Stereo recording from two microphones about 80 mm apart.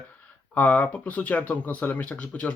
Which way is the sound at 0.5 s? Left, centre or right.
Centre.